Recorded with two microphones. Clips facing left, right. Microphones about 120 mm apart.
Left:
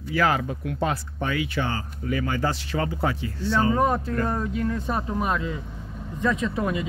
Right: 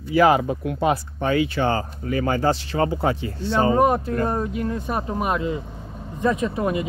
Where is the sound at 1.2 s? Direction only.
30° right (ahead or behind); by 5.6 s 10° right (ahead or behind).